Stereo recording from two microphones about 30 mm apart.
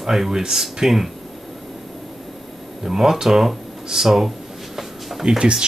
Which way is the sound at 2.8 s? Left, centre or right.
Centre.